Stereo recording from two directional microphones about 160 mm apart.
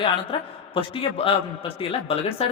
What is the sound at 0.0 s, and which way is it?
Speech, 35° left (ahead or behind).